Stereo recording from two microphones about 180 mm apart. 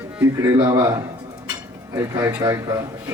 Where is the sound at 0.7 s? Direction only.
15° right (ahead or behind).